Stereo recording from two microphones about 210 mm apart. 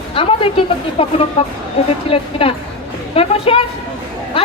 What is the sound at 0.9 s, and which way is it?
A woman's voice, 30° left (ahead or behind).